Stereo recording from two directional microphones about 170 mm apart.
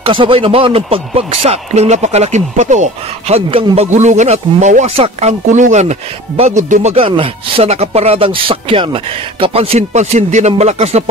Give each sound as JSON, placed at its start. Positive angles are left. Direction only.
{"t": 0.0, "sound": "speech", "side_deg": -30}